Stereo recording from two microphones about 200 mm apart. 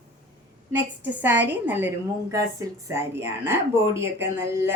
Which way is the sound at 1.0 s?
10° right (ahead or behind).